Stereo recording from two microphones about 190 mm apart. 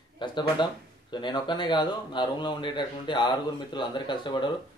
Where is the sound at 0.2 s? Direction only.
25° left (ahead or behind).